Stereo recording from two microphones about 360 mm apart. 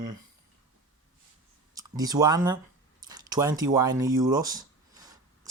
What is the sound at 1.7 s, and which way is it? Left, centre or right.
Speech, centre.